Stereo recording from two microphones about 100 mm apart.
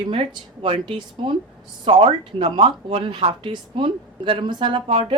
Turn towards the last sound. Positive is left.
turn(degrees=-65)  # may be behind; listen again after turning